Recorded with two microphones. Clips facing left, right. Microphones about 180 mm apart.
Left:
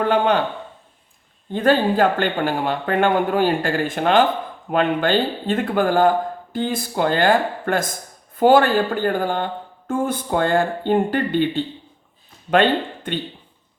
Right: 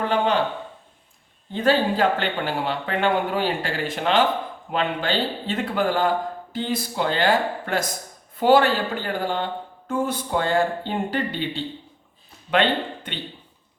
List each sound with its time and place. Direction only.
1.5 s speech: 50° left (ahead or behind)